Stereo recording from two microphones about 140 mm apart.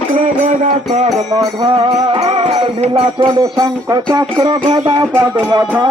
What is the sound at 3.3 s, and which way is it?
Music, 25° right (ahead or behind).